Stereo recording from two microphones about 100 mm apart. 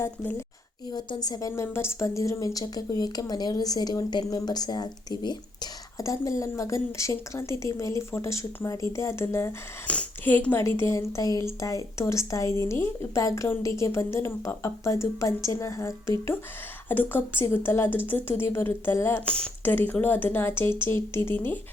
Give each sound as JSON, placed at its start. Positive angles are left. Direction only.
{"t": 0.0, "sound": "speech", "side_deg": 25}
{"t": 0.9, "sound": "speech", "side_deg": 45}
{"t": 6.0, "sound": "speech", "side_deg": 35}
{"t": 9.8, "sound": "speech", "side_deg": 10}
{"t": 19.2, "sound": "speech", "side_deg": 10}
{"t": 19.6, "sound": "speech", "side_deg": 20}